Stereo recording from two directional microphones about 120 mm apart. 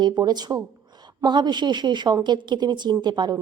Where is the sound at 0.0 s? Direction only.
35° right (ahead or behind).